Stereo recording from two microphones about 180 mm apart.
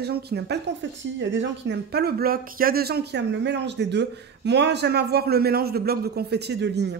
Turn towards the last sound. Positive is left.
turn(degrees=-70)  # may be behind; listen again after turning